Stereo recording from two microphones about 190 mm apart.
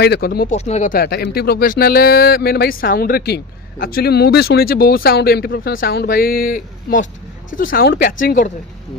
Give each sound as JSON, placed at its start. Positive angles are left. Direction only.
{"t": 0.0, "sound": "speech", "side_deg": 55}
{"t": 0.5, "sound": "speech", "side_deg": 35}
{"t": 0.9, "sound": "speech", "side_deg": 55}